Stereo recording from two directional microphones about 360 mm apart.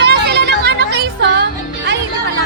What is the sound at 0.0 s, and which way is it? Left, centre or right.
Music, right.